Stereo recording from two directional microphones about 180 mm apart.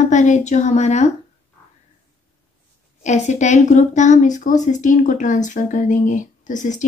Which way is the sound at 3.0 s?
40° left (ahead or behind).